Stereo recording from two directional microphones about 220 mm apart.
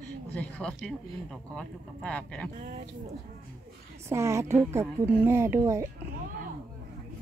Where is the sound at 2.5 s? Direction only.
30° right (ahead or behind).